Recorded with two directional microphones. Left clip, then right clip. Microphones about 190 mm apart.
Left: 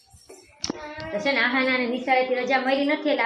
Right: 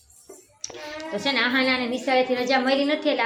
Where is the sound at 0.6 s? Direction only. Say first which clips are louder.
Left 6 dB; 15° right (ahead or behind).